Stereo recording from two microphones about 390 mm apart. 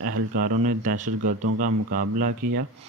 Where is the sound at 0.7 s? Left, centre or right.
Centre.